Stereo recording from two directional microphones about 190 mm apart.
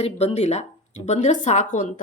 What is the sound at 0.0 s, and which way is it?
Speech, 35° left (ahead or behind).